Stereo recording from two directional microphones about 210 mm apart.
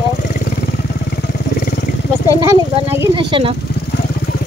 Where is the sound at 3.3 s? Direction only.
25° right (ahead or behind).